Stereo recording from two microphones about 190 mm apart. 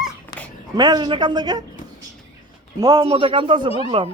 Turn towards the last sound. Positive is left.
turn(degrees=-30)  # may be behind; listen again after turning